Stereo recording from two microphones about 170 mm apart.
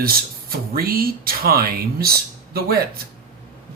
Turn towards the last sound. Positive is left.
turn(degrees=-65)  # may be behind; listen again after turning